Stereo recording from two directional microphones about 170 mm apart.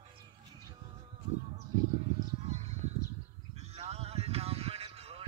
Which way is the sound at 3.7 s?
40° right (ahead or behind).